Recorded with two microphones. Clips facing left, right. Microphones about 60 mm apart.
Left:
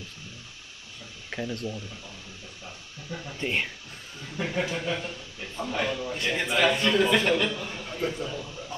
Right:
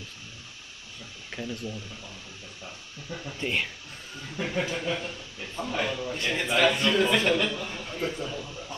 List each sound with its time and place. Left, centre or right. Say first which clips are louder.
1.3 s a sound: left 4 dB; left
3.1 s a man's voice: even; centre
3.3 s speech: left 1 dB; left
4.4 s a man's voice: left 1 dB; centre